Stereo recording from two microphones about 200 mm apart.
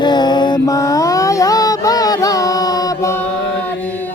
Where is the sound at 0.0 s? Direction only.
20° left (ahead or behind).